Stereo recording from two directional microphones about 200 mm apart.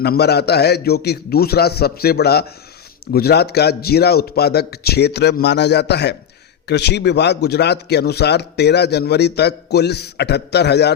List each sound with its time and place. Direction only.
0.0 s a man's voice: 55° left (ahead or behind)